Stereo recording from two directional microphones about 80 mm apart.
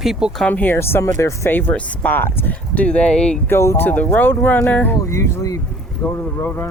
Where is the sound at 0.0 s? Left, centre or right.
Centre.